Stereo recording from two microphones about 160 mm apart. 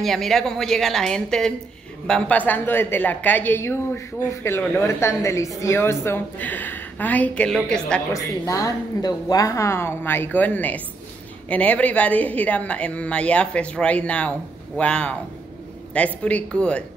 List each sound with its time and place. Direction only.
0.0 s a woman's voice: centre (ahead or behind)
8.1 s a woman's voice: 20° left (ahead or behind)